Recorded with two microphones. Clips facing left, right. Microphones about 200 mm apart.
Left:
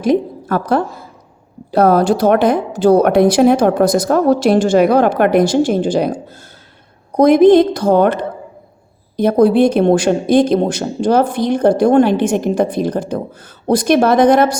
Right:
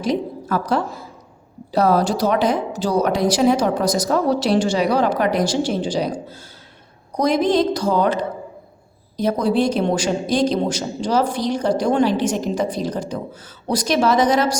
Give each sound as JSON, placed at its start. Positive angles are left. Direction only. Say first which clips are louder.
{"t": 0.0, "sound": "a woman's voice", "louder": "left 7 dB", "side_deg": 55}